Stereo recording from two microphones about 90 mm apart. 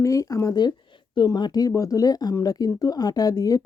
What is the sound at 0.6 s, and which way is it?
Speech, 55° left (ahead or behind).